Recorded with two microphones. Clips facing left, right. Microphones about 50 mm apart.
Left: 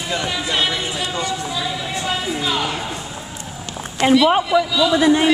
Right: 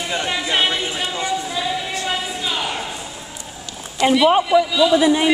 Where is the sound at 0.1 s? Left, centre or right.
Centre.